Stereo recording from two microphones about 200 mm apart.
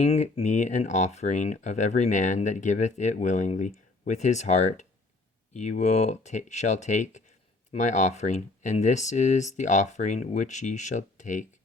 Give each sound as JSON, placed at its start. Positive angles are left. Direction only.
{"t": 0.0, "sound": "speech", "side_deg": 35}